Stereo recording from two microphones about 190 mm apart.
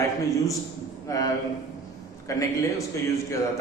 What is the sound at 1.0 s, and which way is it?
A man's voice, 15° left (ahead or behind).